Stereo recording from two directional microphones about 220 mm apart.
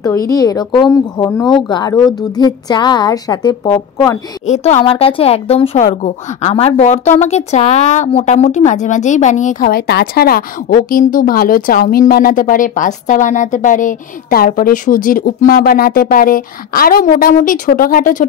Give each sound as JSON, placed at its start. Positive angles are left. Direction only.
{"t": 0.0, "sound": "speech", "side_deg": 15}
{"t": 4.5, "sound": "a woman's voice", "side_deg": 30}